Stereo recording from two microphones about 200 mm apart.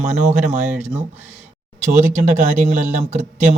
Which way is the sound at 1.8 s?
35° right (ahead or behind).